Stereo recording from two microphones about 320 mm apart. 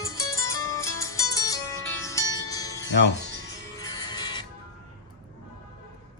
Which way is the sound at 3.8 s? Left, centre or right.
Centre.